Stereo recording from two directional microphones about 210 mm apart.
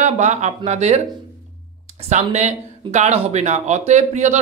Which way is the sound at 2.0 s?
35° right (ahead or behind).